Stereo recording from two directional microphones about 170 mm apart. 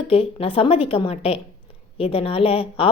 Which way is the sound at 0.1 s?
35° left (ahead or behind).